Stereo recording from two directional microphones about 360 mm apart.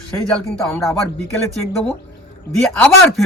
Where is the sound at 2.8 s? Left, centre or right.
Centre.